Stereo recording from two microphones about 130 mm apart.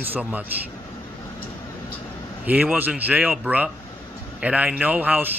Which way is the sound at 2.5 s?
10° right (ahead or behind).